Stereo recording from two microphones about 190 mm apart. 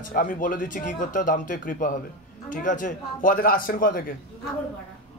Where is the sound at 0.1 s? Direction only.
45° left (ahead or behind).